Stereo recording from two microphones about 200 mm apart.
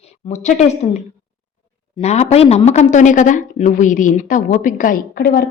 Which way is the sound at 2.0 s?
35° left (ahead or behind).